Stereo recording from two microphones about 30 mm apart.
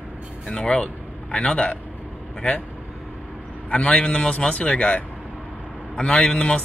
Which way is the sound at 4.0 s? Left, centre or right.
Left.